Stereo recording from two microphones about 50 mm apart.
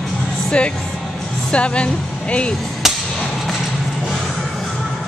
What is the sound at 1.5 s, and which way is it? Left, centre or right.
Speech, left.